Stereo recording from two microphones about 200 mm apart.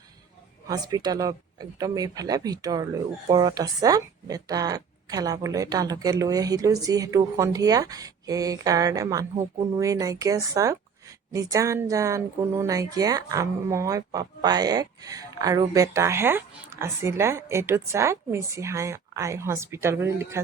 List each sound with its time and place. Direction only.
0.7 s speech: 20° right (ahead or behind)